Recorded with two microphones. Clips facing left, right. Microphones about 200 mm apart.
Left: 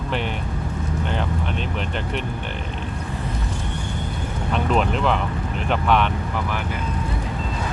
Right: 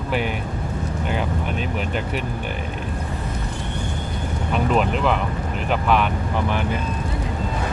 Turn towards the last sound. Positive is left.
turn(degrees=-5)  # may be behind; listen again after turning